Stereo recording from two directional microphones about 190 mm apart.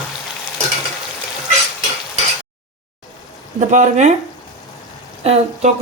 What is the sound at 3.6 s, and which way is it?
Speech, 40° right (ahead or behind).